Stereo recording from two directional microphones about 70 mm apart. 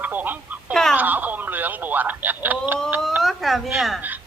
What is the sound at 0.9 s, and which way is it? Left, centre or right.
Speech, right.